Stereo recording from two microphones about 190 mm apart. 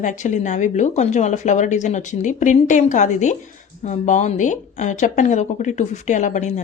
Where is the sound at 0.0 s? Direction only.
40° left (ahead or behind).